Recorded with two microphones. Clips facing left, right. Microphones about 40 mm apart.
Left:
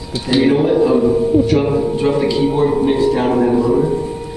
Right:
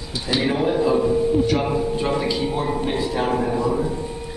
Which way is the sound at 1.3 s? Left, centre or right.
Centre.